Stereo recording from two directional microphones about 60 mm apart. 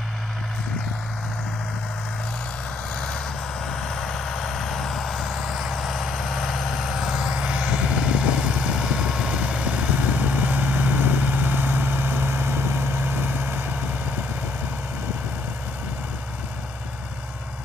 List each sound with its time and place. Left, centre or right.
3.6 s vehicle: centre; by 13.7 s right